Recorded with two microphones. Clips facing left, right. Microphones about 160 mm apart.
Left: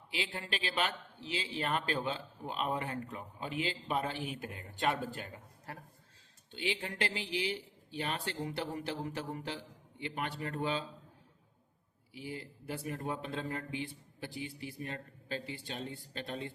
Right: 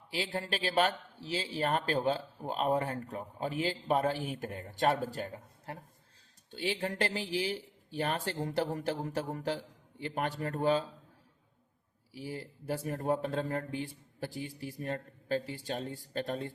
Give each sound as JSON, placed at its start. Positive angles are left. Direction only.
{"t": 0.1, "sound": "a man's voice", "side_deg": -40}
{"t": 6.5, "sound": "speech", "side_deg": -40}
{"t": 12.1, "sound": "speech", "side_deg": -40}